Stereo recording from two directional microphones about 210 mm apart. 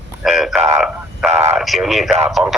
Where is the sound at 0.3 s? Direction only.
Centre (ahead or behind).